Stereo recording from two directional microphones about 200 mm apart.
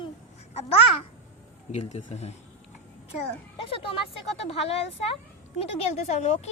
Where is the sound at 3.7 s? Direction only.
25° left (ahead or behind).